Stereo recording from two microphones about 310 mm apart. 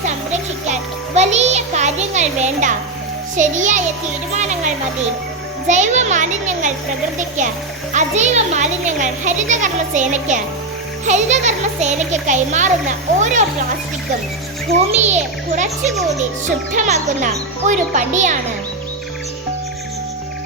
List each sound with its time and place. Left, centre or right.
0.7 s music: right
3.3 s a child's voice: right
7.9 s a child's voice: right
14.8 s a child's voice: right